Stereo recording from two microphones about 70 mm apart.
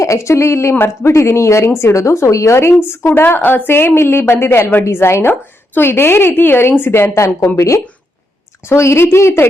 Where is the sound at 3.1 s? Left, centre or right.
Left.